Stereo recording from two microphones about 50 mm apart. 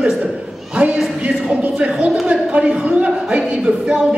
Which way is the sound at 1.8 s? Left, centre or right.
Right.